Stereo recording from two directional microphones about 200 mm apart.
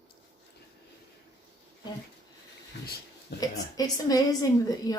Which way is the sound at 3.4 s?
20° left (ahead or behind).